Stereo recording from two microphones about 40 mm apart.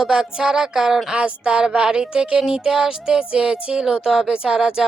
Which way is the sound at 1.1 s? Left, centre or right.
Right.